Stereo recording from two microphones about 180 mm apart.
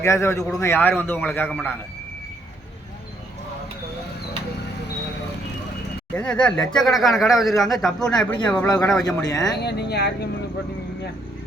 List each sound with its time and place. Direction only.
0.0 s a man's voice: 15° left (ahead or behind)
6.1 s speech: 5° left (ahead or behind)
9.0 s speech: 20° left (ahead or behind)
9.6 s speech: 65° left (ahead or behind)